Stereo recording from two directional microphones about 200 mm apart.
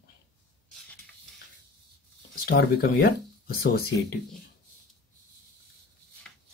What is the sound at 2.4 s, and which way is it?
Speech, 50° left (ahead or behind).